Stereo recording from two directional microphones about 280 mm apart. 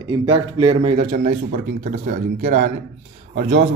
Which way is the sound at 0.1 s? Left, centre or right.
Centre.